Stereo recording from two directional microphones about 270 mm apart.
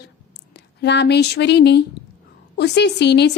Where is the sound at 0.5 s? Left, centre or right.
Left.